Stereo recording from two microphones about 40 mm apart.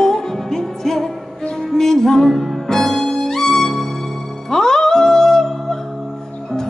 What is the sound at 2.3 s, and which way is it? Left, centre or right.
Music, centre.